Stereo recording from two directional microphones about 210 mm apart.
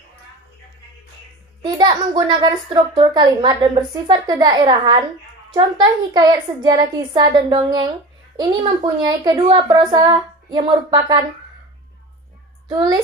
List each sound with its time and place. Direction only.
1.6 s a child's voice: 20° right (ahead or behind)
12.6 s a child's voice: 20° right (ahead or behind)